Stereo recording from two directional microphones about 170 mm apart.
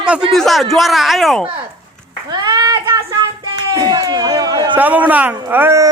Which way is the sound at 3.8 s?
25° right (ahead or behind).